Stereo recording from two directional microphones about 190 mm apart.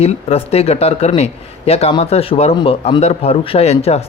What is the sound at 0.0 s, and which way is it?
A man's voice, 30° left (ahead or behind).